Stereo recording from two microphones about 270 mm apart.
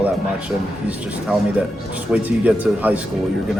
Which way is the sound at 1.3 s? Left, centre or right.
Centre.